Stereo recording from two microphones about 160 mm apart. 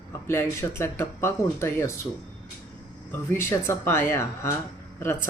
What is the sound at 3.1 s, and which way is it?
Speech, 15° left (ahead or behind).